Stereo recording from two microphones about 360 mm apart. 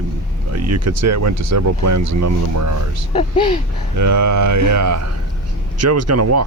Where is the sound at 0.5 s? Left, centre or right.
Right.